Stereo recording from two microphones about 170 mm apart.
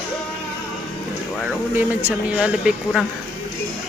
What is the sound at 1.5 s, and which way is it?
Speech, 10° right (ahead or behind).